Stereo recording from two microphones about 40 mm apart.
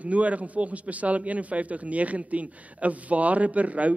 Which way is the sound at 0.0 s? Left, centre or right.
Right.